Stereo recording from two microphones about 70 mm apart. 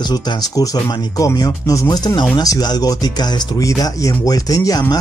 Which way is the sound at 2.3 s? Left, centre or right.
Left.